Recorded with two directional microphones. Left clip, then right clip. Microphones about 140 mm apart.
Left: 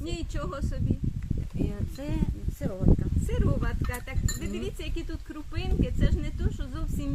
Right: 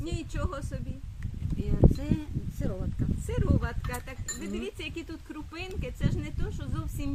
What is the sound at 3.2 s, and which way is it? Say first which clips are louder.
Speech: even; 25° right (ahead or behind).